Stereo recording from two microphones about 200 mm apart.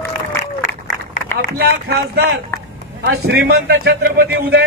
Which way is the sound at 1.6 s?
55° right (ahead or behind).